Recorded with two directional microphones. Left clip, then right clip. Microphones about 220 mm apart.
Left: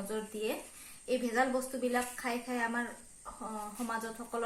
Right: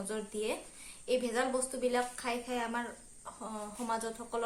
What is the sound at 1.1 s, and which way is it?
Speech, 25° right (ahead or behind).